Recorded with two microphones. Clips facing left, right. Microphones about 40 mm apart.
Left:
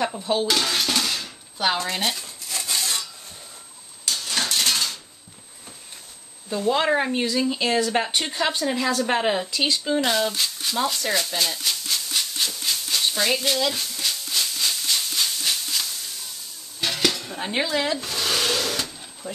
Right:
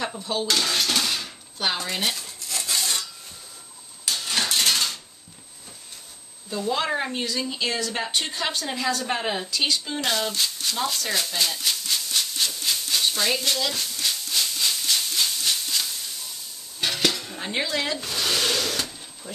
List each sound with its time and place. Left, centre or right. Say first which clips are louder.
0.2 s speech: left 4 dB; left
0.5 s dishes: left 1 dB; centre
4.0 s dog: even; centre
6.7 s speech: left 5 dB; left
7.6 s speech: left 4 dB; left
10.0 s a sound: left 2 dB; centre
16.8 s dishes: left 1 dB; centre
17.6 s speech: left 3 dB; centre
19.2 s speech: left 4 dB; left